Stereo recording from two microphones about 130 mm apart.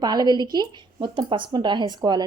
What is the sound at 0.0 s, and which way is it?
Speech, 30° right (ahead or behind).